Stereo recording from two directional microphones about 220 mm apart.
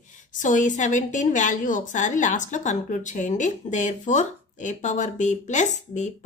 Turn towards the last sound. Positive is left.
turn(degrees=30)  # may be behind; listen again after turning